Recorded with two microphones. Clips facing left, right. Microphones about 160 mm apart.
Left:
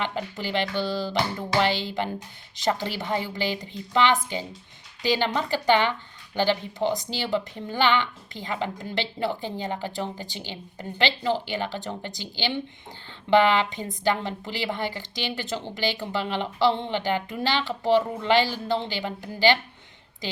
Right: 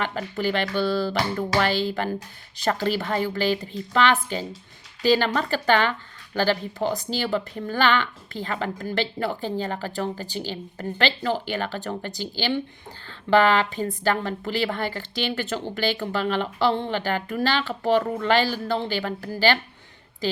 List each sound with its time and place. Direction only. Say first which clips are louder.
0.0 s music: right 4 dB; 20° left (ahead or behind)
2.6 s a woman's voice: right 3 dB; 20° left (ahead or behind)